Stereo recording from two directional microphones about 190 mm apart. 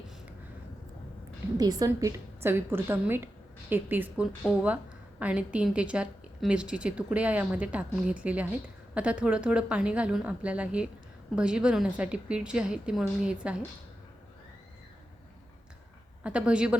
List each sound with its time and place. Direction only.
1.5 s a woman's voice: 20° right (ahead or behind)
16.2 s a woman's voice: 5° right (ahead or behind)